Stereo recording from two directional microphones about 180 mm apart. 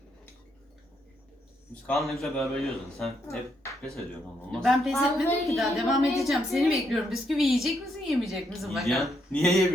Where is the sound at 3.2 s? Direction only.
15° left (ahead or behind).